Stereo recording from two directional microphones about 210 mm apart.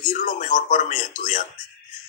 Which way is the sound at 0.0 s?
40° left (ahead or behind).